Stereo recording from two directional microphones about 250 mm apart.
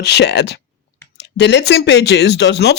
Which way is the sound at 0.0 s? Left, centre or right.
Left.